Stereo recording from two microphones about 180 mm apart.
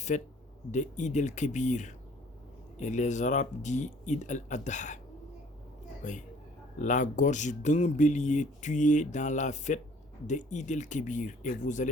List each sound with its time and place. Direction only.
0.1 s speech: 45° left (ahead or behind)
6.0 s a woman's voice: 45° left (ahead or behind)